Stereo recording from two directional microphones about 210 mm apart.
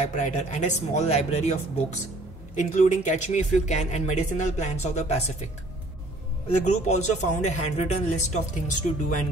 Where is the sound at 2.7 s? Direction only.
35° left (ahead or behind).